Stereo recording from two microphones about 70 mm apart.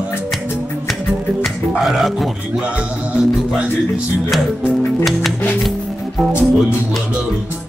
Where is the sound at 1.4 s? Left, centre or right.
Centre.